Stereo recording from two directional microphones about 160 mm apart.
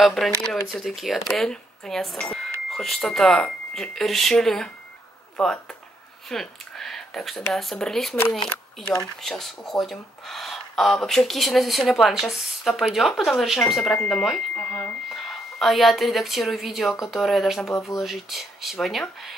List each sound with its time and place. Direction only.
0.0 s speech: centre (ahead or behind)
6.2 s a sound: centre (ahead or behind)
7.5 s speech: centre (ahead or behind)
9.2 s speech: centre (ahead or behind)